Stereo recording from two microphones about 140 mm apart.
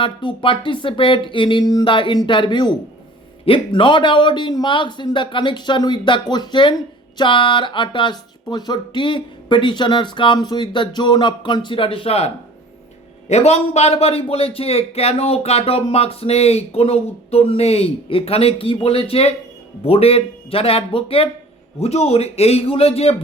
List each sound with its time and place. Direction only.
0.0 s speech: 35° left (ahead or behind)